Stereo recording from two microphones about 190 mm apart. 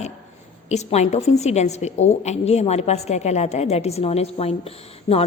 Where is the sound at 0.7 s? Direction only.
35° left (ahead or behind).